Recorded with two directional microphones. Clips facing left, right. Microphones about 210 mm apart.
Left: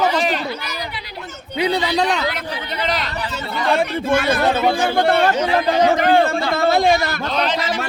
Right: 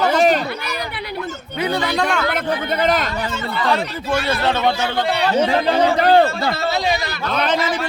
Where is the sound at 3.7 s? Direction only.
50° left (ahead or behind).